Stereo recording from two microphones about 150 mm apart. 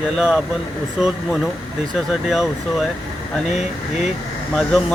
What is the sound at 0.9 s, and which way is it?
Speech, 5° right (ahead or behind).